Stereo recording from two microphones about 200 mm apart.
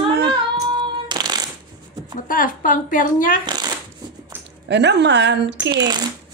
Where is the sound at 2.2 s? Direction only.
45° left (ahead or behind).